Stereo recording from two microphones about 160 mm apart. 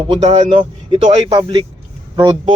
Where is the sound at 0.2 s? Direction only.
45° right (ahead or behind).